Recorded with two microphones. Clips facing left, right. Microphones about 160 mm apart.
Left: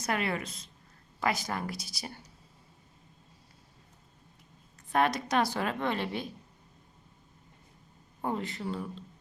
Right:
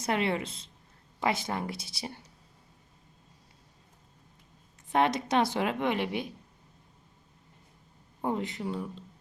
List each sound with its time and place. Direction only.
0.0 s a woman's voice: 25° right (ahead or behind)
4.9 s a woman's voice: 20° right (ahead or behind)
8.2 s speech: 20° right (ahead or behind)